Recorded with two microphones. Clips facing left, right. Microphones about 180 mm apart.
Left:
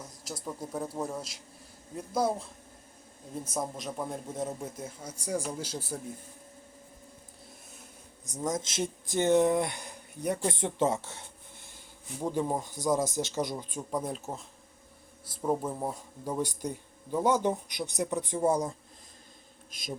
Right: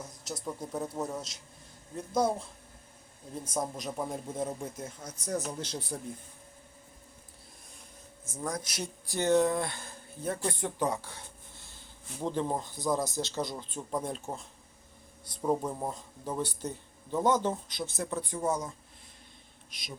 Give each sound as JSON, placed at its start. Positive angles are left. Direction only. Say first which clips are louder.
{"t": 0.0, "sound": "speech", "louder": "right 1 dB", "side_deg": 0}
{"t": 3.4, "sound": "speech", "louder": "right 1 dB", "side_deg": 5}
{"t": 8.2, "sound": "speech", "louder": "left 4 dB", "side_deg": 20}